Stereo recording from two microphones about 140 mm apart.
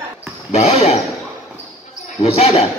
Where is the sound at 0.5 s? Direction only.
50° left (ahead or behind).